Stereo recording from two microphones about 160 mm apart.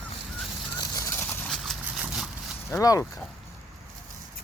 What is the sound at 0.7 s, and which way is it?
Bird, 20° left (ahead or behind).